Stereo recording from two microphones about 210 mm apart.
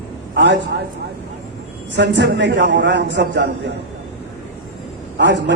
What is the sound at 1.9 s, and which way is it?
A man's voice, 55° right (ahead or behind).